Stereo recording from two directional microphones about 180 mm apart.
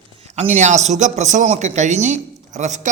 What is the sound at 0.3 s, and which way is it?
A man's voice, 40° right (ahead or behind).